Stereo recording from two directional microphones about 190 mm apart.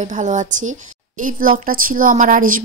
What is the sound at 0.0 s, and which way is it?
Speech, 40° right (ahead or behind).